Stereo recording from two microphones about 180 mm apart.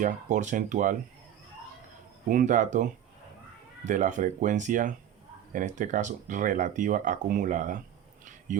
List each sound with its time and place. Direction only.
0.0 s speech: 45° right (ahead or behind)
2.3 s speech: 45° right (ahead or behind)